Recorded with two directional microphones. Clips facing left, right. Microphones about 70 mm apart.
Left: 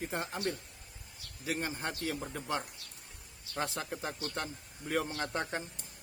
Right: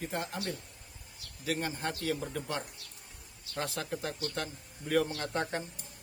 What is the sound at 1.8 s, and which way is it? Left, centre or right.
Speech, centre.